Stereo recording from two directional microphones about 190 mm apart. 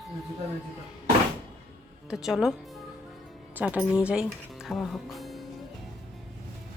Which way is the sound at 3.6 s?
5° right (ahead or behind).